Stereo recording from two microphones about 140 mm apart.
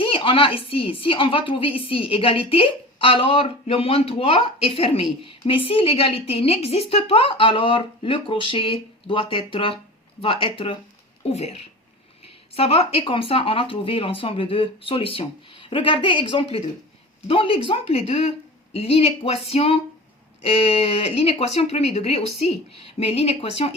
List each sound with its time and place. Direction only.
0.0 s a woman's voice: 40° left (ahead or behind)